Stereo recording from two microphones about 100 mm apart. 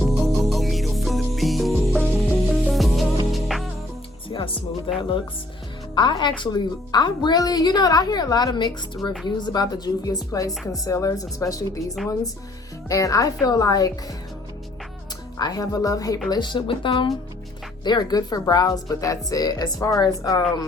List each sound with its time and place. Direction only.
0.0 s music: centre (ahead or behind)
4.3 s music: 60° left (ahead or behind)
4.9 s a woman's voice: 55° left (ahead or behind); by 13.9 s 40° left (ahead or behind)
15.4 s speech: 40° left (ahead or behind)
16.3 s a woman's voice: 50° left (ahead or behind)
17.8 s speech: 45° left (ahead or behind)